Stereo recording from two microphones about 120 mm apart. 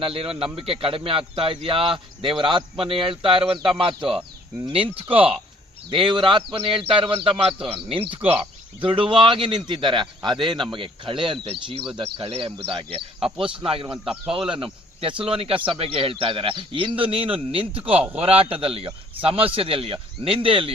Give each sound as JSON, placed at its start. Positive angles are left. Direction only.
{"t": 0.0, "sound": "speech", "side_deg": -50}